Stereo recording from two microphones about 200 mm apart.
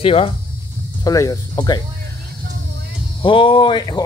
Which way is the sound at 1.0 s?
15° left (ahead or behind).